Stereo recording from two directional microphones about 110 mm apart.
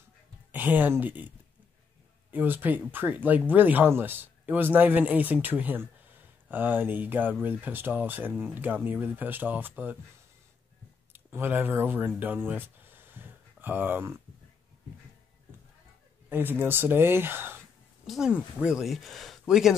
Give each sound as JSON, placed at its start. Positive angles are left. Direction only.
{"t": 0.5, "sound": "speech", "side_deg": -15}
{"t": 2.3, "sound": "speech", "side_deg": -20}
{"t": 11.1, "sound": "speech", "side_deg": -20}
{"t": 16.3, "sound": "speech", "side_deg": -20}
{"t": 18.0, "sound": "speech", "side_deg": -5}